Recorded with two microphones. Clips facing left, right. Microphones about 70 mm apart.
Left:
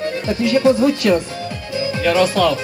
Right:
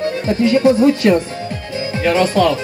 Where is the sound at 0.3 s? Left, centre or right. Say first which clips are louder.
Right 2 dB; right.